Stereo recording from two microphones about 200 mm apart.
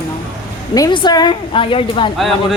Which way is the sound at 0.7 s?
20° left (ahead or behind).